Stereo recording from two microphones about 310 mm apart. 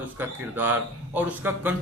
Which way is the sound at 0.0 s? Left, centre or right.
Centre.